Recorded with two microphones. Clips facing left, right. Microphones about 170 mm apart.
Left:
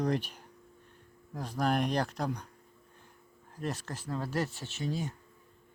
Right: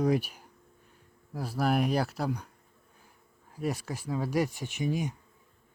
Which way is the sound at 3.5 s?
10° right (ahead or behind).